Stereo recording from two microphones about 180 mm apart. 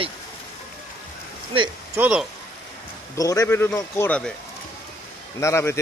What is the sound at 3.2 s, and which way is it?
A man's voice, 20° left (ahead or behind).